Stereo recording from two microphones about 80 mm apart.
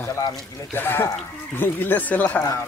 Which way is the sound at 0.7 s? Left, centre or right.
Left.